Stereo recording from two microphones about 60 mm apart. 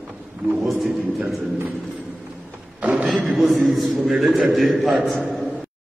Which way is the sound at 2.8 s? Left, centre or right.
Right.